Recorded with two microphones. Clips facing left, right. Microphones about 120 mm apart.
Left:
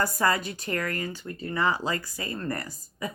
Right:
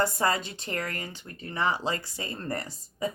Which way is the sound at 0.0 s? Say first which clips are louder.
Left 1 dB; 25° right (ahead or behind).